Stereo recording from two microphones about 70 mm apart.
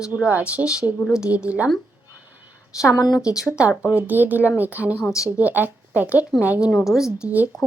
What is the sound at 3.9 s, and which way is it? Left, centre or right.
A woman's voice, right.